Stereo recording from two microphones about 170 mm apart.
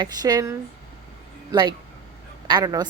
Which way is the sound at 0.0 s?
25° right (ahead or behind).